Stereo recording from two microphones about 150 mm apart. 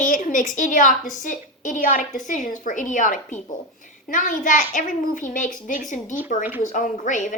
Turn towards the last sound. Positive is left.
turn(degrees=55)  # may be behind; listen again after turning